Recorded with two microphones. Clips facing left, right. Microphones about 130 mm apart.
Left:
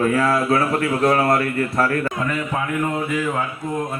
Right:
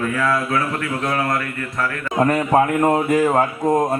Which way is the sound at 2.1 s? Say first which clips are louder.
Right 8 dB; 45° right (ahead or behind).